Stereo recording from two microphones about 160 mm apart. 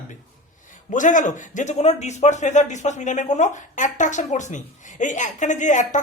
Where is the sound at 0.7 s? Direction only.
55° left (ahead or behind).